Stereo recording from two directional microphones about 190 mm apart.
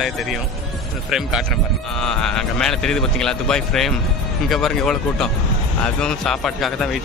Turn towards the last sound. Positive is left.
turn(degrees=0)  # may be behind; listen again after turning